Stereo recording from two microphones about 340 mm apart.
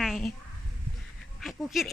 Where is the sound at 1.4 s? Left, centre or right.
Centre.